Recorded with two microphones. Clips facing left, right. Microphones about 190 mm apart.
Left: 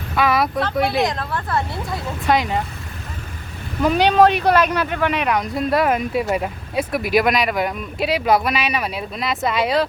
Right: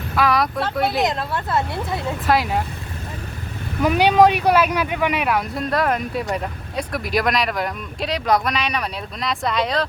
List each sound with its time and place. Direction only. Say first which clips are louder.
0.2 s speech: left 1 dB; centre (ahead or behind)
1.1 s speech: right 1 dB; 25° right (ahead or behind)
2.2 s speech: left 1 dB; 5° right (ahead or behind)
3.8 s speech: even; 10° right (ahead or behind); by 9.8 s 5° left (ahead or behind)